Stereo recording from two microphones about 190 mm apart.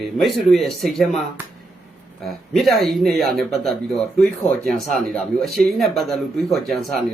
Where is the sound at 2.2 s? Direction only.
Centre (ahead or behind).